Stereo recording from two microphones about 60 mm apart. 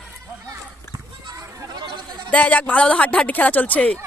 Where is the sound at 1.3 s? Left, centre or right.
Right.